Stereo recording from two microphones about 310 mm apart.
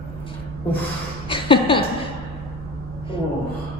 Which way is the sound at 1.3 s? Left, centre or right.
Centre.